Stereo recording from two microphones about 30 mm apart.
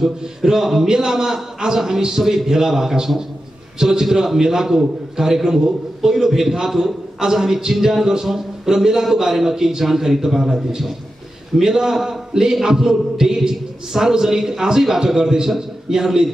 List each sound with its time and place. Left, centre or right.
0.4 s speech: centre